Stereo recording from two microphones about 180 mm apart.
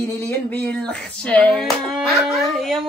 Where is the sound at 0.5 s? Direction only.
5° left (ahead or behind).